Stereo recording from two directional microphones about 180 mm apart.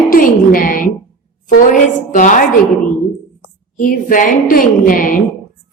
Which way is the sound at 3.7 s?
50° left (ahead or behind).